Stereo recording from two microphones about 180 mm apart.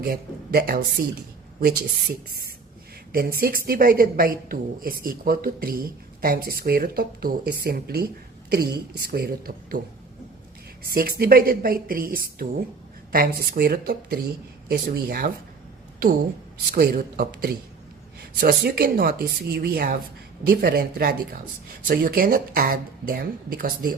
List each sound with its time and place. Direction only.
0.0 s a woman's voice: 55° right (ahead or behind)
3.1 s a woman's voice: 55° right (ahead or behind)
11.2 s a woman's voice: 55° right (ahead or behind)
16.7 s a woman's voice: 55° right (ahead or behind)